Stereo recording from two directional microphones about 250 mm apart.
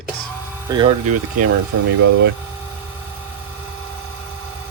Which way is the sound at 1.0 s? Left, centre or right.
Right.